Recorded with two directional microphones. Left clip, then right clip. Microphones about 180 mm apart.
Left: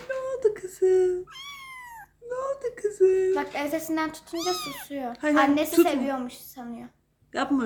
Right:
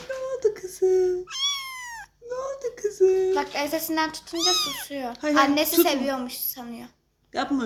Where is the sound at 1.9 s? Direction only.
Centre (ahead or behind).